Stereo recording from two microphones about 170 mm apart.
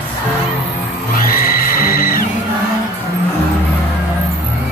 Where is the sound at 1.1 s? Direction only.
55° left (ahead or behind).